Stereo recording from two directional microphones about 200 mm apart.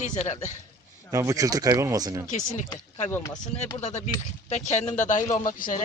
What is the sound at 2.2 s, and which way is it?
Speech, 40° left (ahead or behind).